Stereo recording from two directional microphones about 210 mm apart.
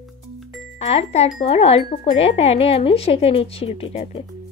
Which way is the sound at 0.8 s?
30° left (ahead or behind).